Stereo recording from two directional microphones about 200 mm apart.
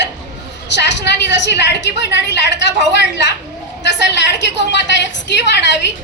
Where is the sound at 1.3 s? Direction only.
60° left (ahead or behind).